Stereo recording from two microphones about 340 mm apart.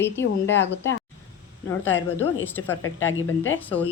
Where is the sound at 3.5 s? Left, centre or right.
Centre.